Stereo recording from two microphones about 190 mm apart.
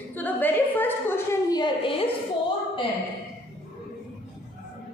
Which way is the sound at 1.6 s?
30° left (ahead or behind).